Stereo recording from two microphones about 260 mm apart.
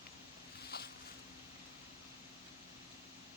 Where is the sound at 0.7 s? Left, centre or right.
Left.